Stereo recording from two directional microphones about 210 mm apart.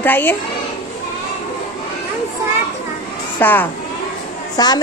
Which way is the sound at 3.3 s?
10° left (ahead or behind).